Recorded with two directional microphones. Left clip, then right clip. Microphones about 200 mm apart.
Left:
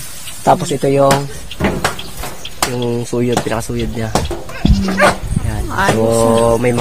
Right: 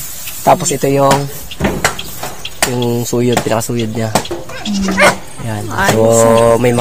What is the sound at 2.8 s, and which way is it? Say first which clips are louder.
Speech: right 2 dB; 45° right (ahead or behind).